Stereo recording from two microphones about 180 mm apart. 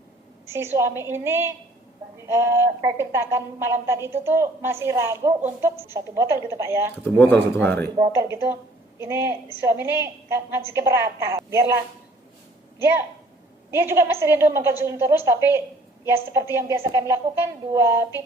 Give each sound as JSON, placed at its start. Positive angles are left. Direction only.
{"t": 0.4, "sound": "a woman's voice", "side_deg": -15}
{"t": 7.0, "sound": "a man's voice", "side_deg": 10}
{"t": 8.1, "sound": "a woman's voice", "side_deg": -15}
{"t": 13.7, "sound": "a woman's voice", "side_deg": -15}